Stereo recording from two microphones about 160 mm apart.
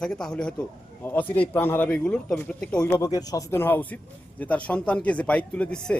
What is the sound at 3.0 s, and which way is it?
Speech, 20° left (ahead or behind).